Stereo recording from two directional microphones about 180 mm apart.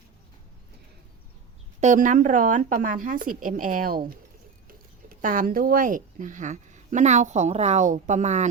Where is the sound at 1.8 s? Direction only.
45° right (ahead or behind).